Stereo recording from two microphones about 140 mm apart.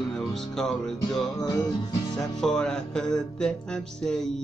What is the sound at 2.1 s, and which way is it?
Music, 5° left (ahead or behind).